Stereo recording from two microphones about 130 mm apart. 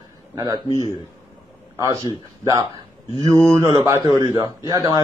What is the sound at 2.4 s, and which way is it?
A man's voice, 30° right (ahead or behind).